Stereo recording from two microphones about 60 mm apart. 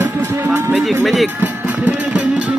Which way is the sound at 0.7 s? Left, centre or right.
Centre.